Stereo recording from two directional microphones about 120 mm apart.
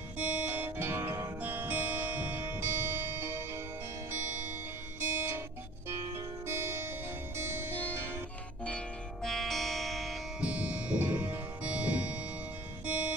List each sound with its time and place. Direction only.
0.2 s music: 15° right (ahead or behind)
5.0 s music: 15° right (ahead or behind)
8.6 s music: 5° left (ahead or behind)
10.4 s music: 10° right (ahead or behind)